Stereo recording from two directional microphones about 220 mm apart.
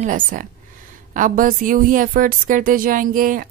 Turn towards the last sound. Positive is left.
turn(degrees=-40)  # may be behind; listen again after turning